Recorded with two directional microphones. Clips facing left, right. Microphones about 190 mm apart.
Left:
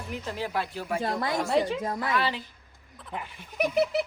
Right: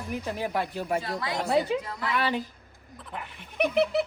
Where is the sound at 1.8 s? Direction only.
45° left (ahead or behind).